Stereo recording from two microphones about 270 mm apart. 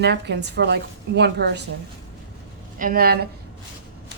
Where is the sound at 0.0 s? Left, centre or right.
Right.